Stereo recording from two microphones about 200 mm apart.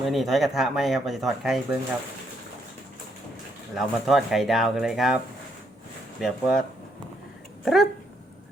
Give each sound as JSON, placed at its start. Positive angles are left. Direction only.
{"t": 0.0, "sound": "speech", "side_deg": 0}
{"t": 3.8, "sound": "speech", "side_deg": 0}